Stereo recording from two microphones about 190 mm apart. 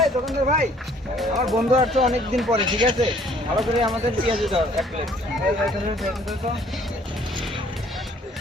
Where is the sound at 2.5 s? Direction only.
25° right (ahead or behind).